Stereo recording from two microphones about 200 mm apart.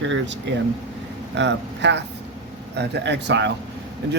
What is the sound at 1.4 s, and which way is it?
Speech, 60° right (ahead or behind).